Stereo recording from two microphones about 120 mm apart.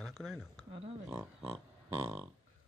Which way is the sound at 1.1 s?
15° right (ahead or behind).